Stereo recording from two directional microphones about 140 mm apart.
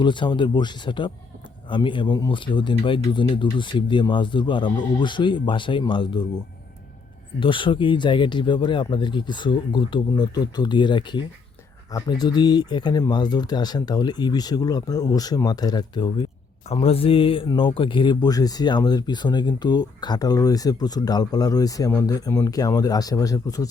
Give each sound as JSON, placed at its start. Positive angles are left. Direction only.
{"t": 0.0, "sound": "speech", "side_deg": 35}
{"t": 7.3, "sound": "speech", "side_deg": 35}
{"t": 16.7, "sound": "speech", "side_deg": 40}